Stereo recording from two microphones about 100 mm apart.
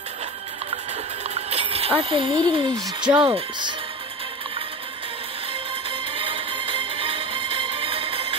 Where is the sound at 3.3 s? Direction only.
60° right (ahead or behind).